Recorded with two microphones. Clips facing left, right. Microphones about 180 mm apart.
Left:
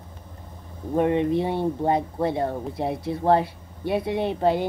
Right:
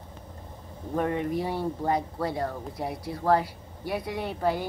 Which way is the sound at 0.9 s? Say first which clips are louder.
Left 6 dB; 20° left (ahead or behind).